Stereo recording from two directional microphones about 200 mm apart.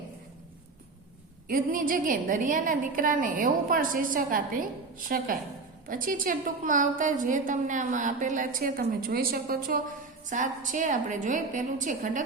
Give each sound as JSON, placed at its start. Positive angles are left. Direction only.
{"t": 1.5, "sound": "a woman's voice", "side_deg": -45}